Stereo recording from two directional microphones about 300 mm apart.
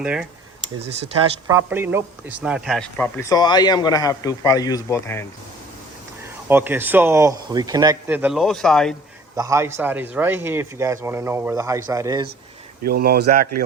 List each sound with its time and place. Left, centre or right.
0.0 s speech: centre
1.5 s speech: centre
6.5 s speech: centre
9.3 s speech: centre
12.8 s speech: right